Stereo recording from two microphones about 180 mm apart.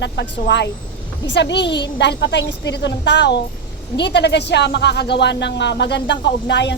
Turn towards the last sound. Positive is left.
turn(degrees=75)  # may be behind; listen again after turning